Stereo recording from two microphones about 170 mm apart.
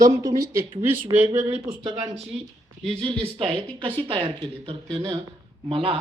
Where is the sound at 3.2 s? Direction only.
30° right (ahead or behind).